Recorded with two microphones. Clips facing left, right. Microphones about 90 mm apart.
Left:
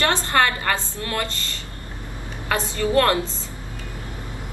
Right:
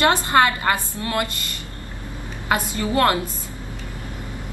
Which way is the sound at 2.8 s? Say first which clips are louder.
Left 1 dB; 20° right (ahead or behind).